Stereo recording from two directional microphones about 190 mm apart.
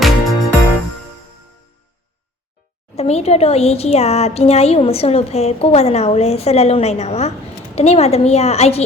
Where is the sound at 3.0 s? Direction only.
35° left (ahead or behind).